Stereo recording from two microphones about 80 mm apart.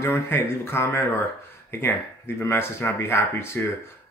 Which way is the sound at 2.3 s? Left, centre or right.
Left.